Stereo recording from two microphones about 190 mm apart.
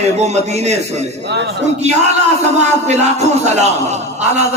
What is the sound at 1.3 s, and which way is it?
Speech, 65° right (ahead or behind).